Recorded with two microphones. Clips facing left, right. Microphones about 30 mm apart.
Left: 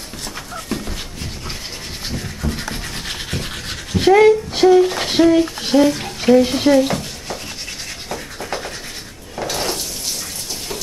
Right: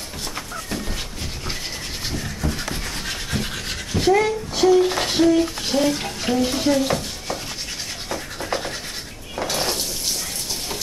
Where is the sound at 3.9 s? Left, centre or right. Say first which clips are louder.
Left 7 dB; left.